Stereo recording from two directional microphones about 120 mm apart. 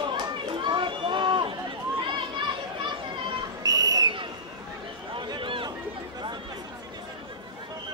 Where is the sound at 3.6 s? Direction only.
30° right (ahead or behind).